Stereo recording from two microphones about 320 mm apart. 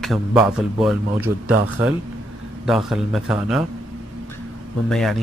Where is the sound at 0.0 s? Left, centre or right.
Centre.